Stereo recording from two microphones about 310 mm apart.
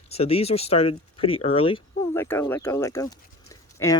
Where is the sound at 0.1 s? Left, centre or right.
Centre.